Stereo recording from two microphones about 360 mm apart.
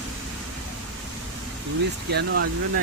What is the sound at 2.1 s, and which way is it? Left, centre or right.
Speech, right.